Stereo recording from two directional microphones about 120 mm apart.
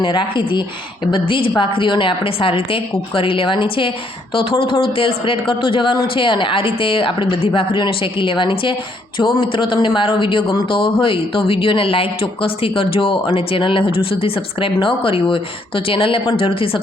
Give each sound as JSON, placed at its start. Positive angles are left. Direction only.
{"t": 0.0, "sound": "speech", "side_deg": 40}